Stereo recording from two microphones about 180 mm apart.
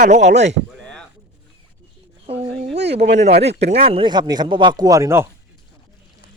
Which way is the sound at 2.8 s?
70° right (ahead or behind).